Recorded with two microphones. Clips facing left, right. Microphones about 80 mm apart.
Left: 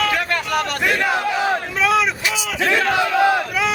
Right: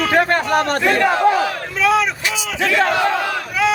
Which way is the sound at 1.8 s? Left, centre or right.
Centre.